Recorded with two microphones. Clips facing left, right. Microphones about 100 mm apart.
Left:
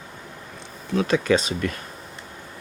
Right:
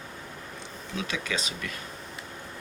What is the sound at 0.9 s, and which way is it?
Speech, 45° left (ahead or behind).